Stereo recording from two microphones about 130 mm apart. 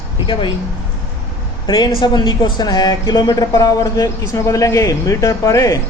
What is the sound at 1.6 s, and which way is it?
A man's voice, 35° left (ahead or behind).